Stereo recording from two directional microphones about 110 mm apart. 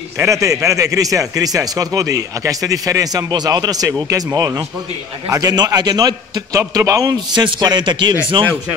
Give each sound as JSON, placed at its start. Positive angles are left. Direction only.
{"t": 0.2, "sound": "a man's voice", "side_deg": -30}
{"t": 7.3, "sound": "speech", "side_deg": -40}